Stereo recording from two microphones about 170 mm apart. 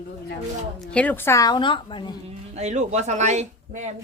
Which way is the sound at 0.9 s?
10° left (ahead or behind).